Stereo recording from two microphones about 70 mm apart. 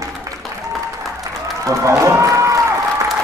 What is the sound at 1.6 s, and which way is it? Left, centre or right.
A man's voice, right.